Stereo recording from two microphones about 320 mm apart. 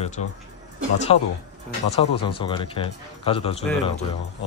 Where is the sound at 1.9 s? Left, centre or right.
Centre.